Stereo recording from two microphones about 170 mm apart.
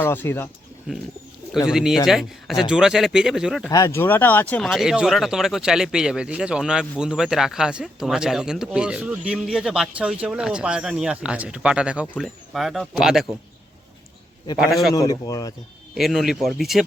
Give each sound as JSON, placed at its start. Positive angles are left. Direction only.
{"t": 0.0, "sound": "speech", "side_deg": 15}
{"t": 1.6, "sound": "speech", "side_deg": -5}
{"t": 3.7, "sound": "speech", "side_deg": 20}
{"t": 14.6, "sound": "speech", "side_deg": 0}
{"t": 14.9, "sound": "speech", "side_deg": 20}
{"t": 16.0, "sound": "speech", "side_deg": 0}